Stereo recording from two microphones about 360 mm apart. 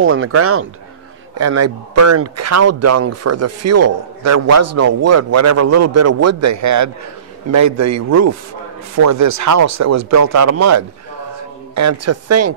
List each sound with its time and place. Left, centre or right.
0.0 s speech: right